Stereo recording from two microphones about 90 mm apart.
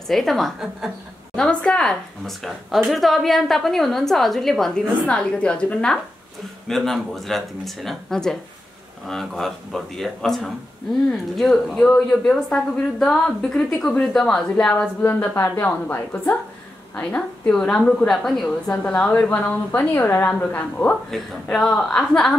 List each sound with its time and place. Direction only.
0.1 s speech: centre (ahead or behind)
1.3 s a woman's voice: 10° left (ahead or behind)
15.0 s a woman's voice: 25° left (ahead or behind)
21.5 s a woman's voice: 5° left (ahead or behind)